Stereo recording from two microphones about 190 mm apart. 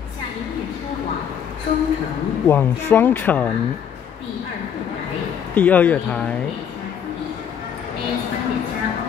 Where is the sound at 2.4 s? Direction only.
10° left (ahead or behind).